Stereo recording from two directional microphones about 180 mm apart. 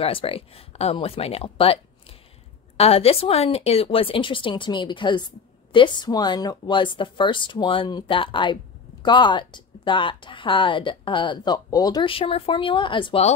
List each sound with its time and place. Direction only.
0.0 s speech: 30° left (ahead or behind)